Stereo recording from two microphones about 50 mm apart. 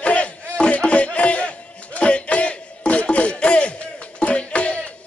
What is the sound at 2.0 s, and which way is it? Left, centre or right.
Music, left.